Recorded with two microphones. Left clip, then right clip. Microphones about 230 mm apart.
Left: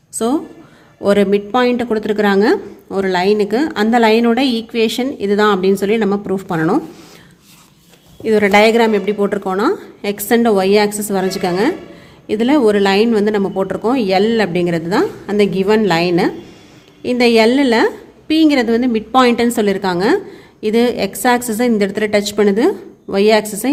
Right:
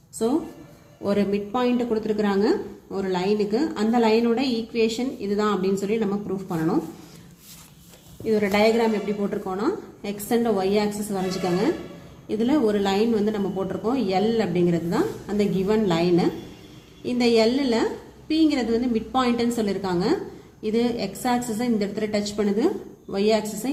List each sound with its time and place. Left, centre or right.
1.0 s speech: left
8.2 s speech: left